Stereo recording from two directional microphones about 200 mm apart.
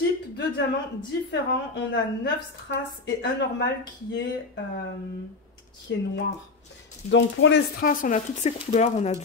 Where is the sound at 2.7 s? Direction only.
60° left (ahead or behind).